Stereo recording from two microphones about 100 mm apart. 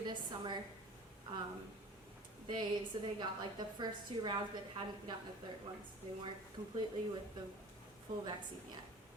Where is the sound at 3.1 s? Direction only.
50° right (ahead or behind).